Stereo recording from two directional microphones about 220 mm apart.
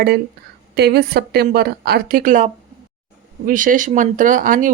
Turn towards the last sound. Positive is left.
turn(degrees=-35)  # may be behind; listen again after turning